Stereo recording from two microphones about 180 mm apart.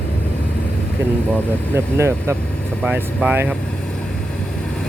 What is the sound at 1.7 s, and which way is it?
Speech, 15° right (ahead or behind).